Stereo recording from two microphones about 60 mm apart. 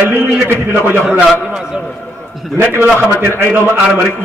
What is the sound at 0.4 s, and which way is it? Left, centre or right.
Speech, right.